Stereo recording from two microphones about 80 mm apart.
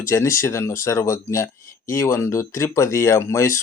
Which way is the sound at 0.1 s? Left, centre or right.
Left.